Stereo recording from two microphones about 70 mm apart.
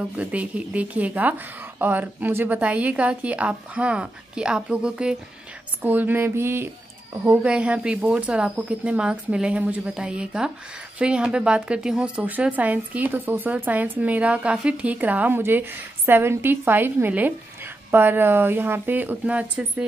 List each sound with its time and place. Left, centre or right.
0.2 s speech: centre
2.6 s a woman's voice: centre
5.8 s mantra: right
7.4 s a woman's voice: centre